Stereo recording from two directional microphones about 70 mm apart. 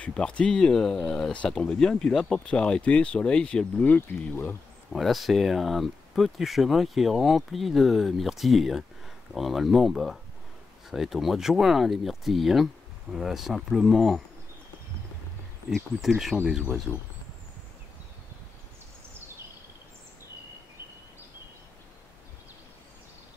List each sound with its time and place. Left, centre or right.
0.0 s speech: centre
4.1 s speech: left
4.9 s speech: centre
16.1 s speech: centre